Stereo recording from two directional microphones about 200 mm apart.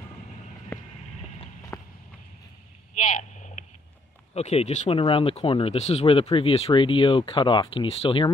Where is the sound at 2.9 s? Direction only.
40° left (ahead or behind).